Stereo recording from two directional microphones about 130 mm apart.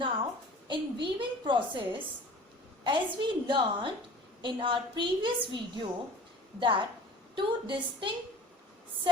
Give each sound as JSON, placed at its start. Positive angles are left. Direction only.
{"t": 0.7, "sound": "a woman's voice", "side_deg": -40}